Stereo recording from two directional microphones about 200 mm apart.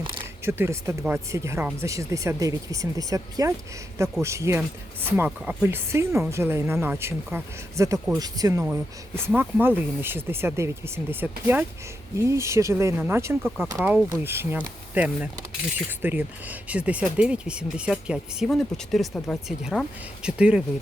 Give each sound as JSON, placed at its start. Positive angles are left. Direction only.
{"t": 0.4, "sound": "speech", "side_deg": -15}
{"t": 8.2, "sound": "speech", "side_deg": -20}